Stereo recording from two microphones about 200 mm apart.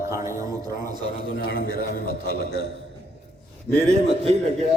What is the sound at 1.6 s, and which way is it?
A man's voice, 50° right (ahead or behind).